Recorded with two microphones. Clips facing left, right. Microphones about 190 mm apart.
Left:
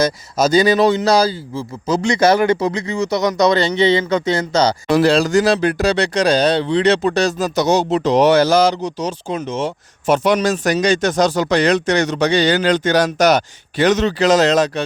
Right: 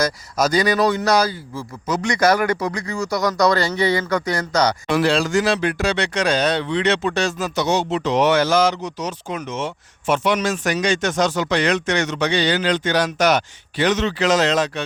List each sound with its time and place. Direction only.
0.0 s a man's voice: 25° left (ahead or behind)